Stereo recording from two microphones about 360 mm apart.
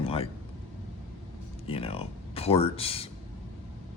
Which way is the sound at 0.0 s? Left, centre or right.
Centre.